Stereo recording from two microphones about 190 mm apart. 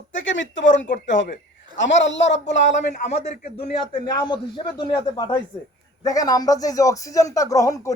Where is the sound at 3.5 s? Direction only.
30° left (ahead or behind).